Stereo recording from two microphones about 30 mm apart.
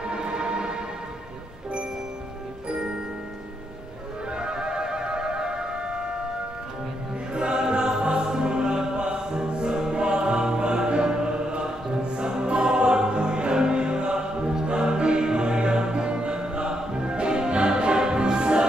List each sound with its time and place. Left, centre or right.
0.0 s music: right
4.4 s music: right
7.3 s music: right